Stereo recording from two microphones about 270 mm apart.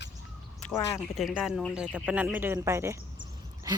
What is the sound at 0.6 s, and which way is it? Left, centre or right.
Speech, centre.